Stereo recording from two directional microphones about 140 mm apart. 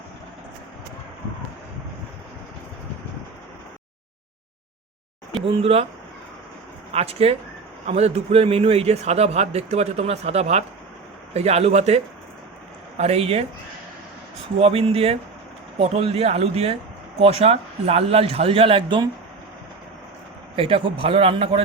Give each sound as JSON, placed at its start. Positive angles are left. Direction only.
{"t": 5.3, "sound": "speech", "side_deg": -40}
{"t": 6.9, "sound": "a man's voice", "side_deg": -45}
{"t": 14.6, "sound": "a man's voice", "side_deg": -45}
{"t": 20.6, "sound": "a man's voice", "side_deg": -40}